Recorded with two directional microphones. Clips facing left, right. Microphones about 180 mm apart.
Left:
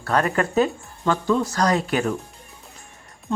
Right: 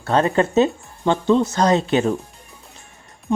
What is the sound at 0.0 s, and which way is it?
Speech, 25° right (ahead or behind).